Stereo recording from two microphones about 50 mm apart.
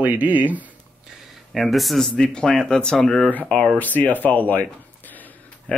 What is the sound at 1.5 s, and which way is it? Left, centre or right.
Speech, centre.